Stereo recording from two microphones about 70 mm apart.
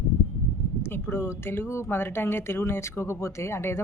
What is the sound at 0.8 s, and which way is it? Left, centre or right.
A woman's voice, left.